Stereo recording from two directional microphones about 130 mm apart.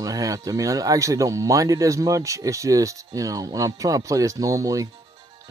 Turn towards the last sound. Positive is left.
turn(degrees=-25)  # may be behind; listen again after turning